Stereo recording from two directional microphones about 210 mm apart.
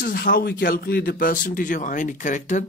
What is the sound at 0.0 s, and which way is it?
Speech, 45° left (ahead or behind).